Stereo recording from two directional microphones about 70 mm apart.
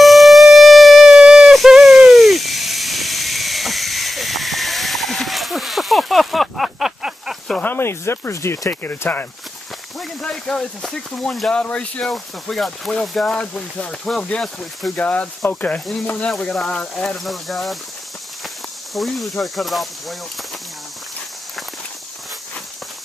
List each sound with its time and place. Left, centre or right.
0.0 s a sound: centre
7.6 s speech: left
10.2 s speech: centre
15.0 s speech: centre
16.3 s speech: centre
17.2 s speech: centre
18.9 s speech: centre